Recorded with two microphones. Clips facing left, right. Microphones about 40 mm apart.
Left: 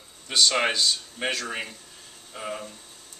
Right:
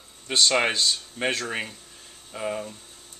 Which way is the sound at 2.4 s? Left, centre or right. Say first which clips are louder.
Right 4 dB; centre.